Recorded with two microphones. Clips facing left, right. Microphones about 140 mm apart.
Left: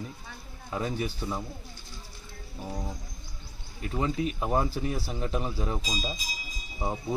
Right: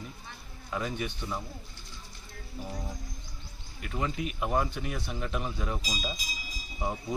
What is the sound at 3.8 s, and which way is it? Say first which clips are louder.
Speech: left 4 dB; 30° left (ahead or behind).